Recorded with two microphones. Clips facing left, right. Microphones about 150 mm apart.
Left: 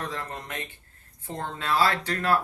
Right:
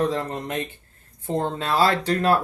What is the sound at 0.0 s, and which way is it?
Speech, 25° right (ahead or behind).